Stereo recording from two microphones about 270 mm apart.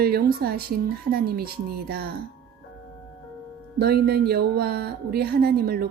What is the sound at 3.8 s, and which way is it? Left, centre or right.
Speech, right.